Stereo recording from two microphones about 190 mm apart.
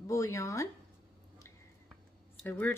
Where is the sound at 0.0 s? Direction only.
15° left (ahead or behind).